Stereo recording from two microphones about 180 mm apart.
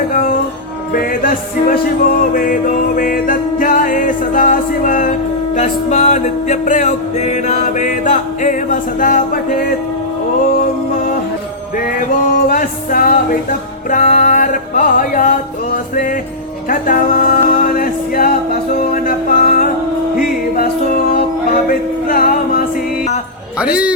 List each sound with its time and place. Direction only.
0.1 s music: 50° left (ahead or behind)
12.5 s music: 50° left (ahead or behind)
21.7 s music: 50° left (ahead or behind)
23.6 s a man's voice: 5° right (ahead or behind)